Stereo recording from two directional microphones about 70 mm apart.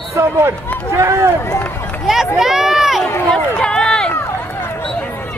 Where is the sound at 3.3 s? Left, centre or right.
Centre.